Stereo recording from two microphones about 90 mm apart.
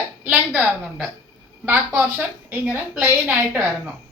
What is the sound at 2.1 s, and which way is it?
A woman's voice, 20° right (ahead or behind).